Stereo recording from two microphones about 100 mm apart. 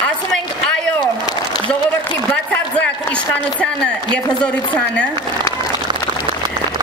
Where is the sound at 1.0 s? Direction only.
45° left (ahead or behind).